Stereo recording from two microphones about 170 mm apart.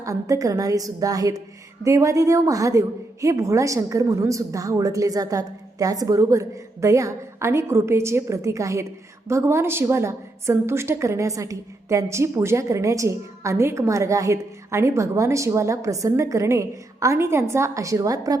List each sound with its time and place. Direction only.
0.0 s a woman's voice: 20° right (ahead or behind)